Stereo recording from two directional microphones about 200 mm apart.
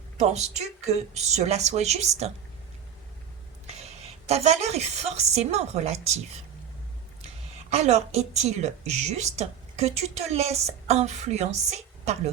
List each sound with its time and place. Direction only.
0.2 s a woman's voice: 35° right (ahead or behind)
3.7 s a woman's voice: 30° right (ahead or behind)
7.7 s a woman's voice: 35° right (ahead or behind)